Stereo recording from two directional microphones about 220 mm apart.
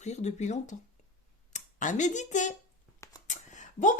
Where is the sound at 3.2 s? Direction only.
35° left (ahead or behind).